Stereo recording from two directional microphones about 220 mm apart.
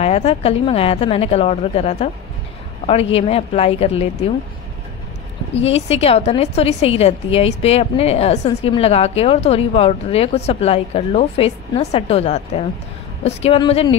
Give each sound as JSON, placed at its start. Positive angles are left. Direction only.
{"t": 0.0, "sound": "a woman's voice", "side_deg": 30}
{"t": 5.5, "sound": "a woman's voice", "side_deg": 30}